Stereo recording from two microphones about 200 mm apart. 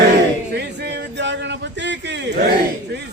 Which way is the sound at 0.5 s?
55° right (ahead or behind).